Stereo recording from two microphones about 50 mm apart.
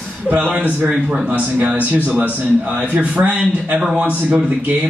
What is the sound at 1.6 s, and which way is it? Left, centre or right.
A man's voice, right.